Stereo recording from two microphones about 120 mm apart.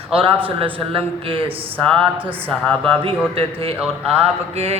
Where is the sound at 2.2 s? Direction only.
15° right (ahead or behind).